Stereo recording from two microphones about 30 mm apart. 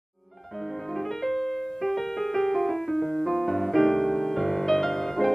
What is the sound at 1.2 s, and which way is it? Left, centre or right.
Music, centre.